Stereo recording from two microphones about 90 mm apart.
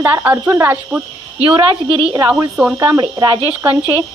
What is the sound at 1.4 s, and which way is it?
Speech, 85° right.